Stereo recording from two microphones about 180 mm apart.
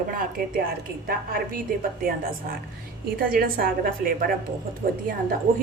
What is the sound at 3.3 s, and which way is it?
Speech, 55° right (ahead or behind).